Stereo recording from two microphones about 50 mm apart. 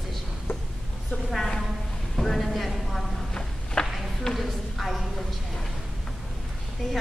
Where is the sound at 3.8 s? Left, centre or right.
Centre.